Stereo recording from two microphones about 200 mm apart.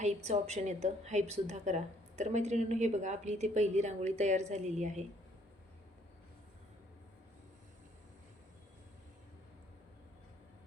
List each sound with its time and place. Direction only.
0.0 s a woman's voice: 35° right (ahead or behind)